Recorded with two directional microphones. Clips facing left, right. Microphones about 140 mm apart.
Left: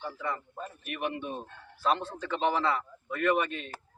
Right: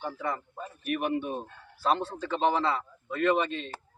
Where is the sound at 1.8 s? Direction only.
35° right (ahead or behind).